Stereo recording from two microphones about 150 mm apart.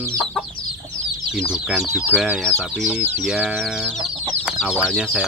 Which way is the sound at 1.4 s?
5° right (ahead or behind).